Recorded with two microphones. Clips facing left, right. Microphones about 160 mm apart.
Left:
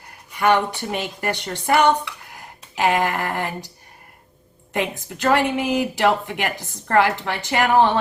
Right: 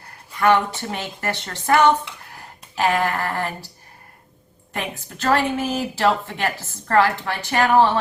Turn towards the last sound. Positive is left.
turn(degrees=20)  # may be behind; listen again after turning